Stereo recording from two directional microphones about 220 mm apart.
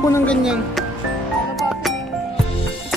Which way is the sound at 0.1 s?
5° left (ahead or behind).